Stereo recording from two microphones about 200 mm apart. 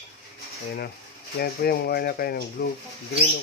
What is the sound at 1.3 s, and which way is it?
Speech, 50° left (ahead or behind).